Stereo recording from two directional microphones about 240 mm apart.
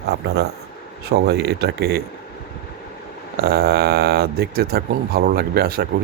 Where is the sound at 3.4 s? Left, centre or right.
Right.